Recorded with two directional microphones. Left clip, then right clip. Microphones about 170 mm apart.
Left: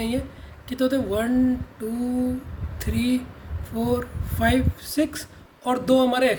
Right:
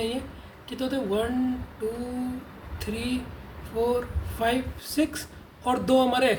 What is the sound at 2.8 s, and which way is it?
Speech, 45° left (ahead or behind).